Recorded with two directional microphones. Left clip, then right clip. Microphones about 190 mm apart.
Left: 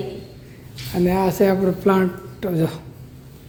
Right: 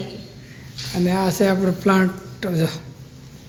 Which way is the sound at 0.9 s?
10° left (ahead or behind).